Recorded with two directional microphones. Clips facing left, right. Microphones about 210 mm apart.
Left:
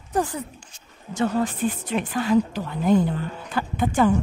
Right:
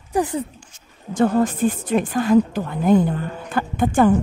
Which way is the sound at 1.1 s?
50° right (ahead or behind).